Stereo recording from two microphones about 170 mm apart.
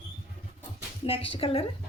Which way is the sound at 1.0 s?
30° left (ahead or behind).